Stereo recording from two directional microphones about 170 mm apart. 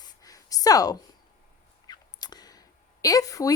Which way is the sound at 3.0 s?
20° left (ahead or behind).